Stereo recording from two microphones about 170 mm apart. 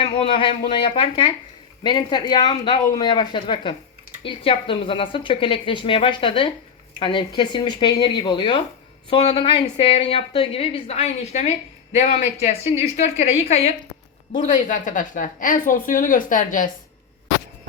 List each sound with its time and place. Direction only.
0.0 s a woman's voice: 30° left (ahead or behind)
14.4 s a woman's voice: 50° left (ahead or behind)